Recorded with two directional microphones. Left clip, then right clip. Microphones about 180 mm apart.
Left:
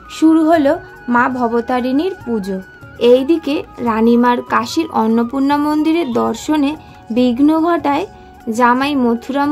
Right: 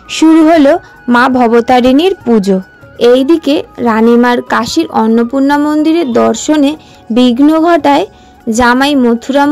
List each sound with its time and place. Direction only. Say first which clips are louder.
0.4 s speech: right 6 dB; 35° right (ahead or behind)